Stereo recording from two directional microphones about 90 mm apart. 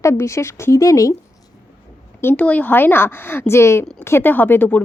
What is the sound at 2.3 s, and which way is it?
Speech, 15° left (ahead or behind).